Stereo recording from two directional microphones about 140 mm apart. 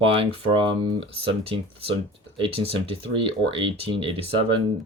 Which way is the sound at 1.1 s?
45° right (ahead or behind).